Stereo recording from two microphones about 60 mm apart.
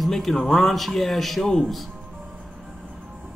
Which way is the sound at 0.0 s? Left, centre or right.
Centre.